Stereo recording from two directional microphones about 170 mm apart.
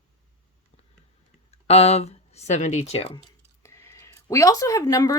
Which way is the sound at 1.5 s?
40° left (ahead or behind).